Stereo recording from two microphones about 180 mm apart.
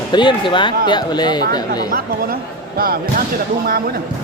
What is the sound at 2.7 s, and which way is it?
Speech, 55° right (ahead or behind).